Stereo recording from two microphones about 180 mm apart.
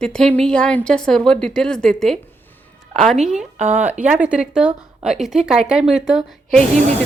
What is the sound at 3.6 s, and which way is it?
Speech, 40° right (ahead or behind).